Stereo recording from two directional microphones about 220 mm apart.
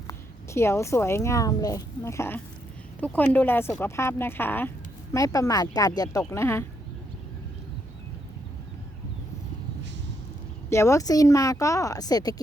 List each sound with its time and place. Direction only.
0.1 s speech: 10° left (ahead or behind)
10.7 s speech: 15° left (ahead or behind)